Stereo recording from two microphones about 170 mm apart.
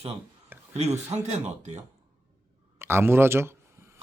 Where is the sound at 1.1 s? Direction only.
40° right (ahead or behind).